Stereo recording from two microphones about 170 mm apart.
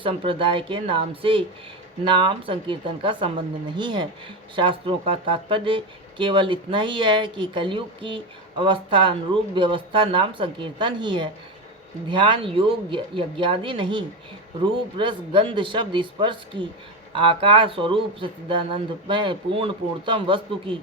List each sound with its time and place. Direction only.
0.0 s speech: 30° right (ahead or behind)